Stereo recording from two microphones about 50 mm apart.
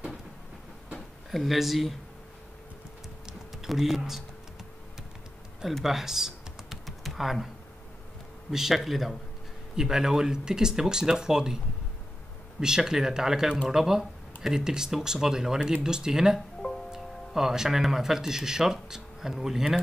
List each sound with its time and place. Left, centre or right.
1.3 s speech: centre
3.6 s speech: centre
5.8 s computer keyboard: centre
8.5 s speech: centre
12.5 s speech: centre